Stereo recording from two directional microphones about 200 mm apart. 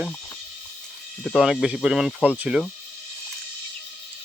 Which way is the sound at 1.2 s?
Centre (ahead or behind).